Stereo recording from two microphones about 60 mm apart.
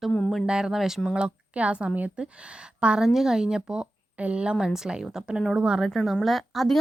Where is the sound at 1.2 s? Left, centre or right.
Centre.